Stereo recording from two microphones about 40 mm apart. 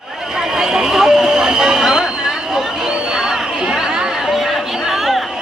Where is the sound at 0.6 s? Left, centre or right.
Centre.